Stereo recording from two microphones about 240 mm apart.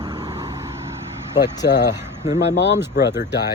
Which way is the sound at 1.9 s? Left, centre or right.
Centre.